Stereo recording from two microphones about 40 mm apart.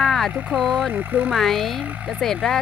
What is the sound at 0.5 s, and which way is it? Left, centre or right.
Speech, right.